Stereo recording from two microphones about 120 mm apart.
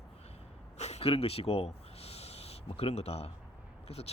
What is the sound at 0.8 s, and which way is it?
Speech, 65° left (ahead or behind).